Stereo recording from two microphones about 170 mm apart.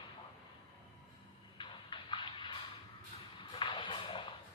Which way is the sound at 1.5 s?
25° left (ahead or behind).